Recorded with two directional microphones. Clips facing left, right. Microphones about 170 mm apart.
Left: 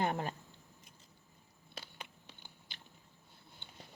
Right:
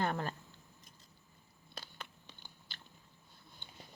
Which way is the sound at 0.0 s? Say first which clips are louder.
Left 1 dB; 20° left (ahead or behind).